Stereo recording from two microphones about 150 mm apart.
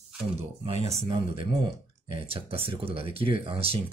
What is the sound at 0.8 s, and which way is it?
Speech, 40° right (ahead or behind).